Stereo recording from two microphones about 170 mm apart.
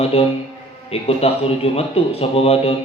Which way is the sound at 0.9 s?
35° left (ahead or behind).